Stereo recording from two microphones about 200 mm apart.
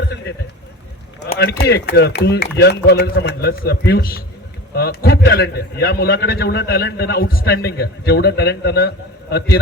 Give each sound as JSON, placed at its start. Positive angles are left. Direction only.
{"t": 1.4, "sound": "a man's voice", "side_deg": 50}